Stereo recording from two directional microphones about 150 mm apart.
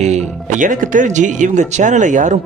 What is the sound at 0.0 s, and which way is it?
Speech, 50° right (ahead or behind).